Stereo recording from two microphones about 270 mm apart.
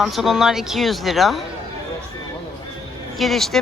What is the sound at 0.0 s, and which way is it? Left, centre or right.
Speech, centre.